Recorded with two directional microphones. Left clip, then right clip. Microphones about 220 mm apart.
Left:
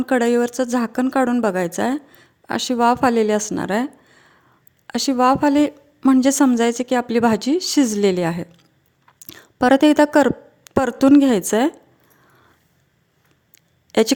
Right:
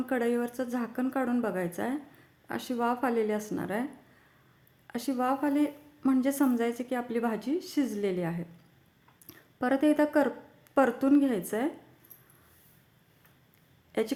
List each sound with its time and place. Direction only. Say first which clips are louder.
0.0 s speech: left 12 dB; 45° left (ahead or behind)
4.9 s speech: left 13 dB; 45° left (ahead or behind)
13.9 s speech: left 14 dB; 45° left (ahead or behind)